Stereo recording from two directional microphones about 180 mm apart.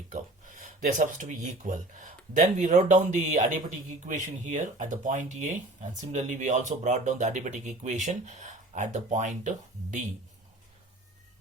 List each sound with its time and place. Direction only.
0.1 s speech: 45° right (ahead or behind)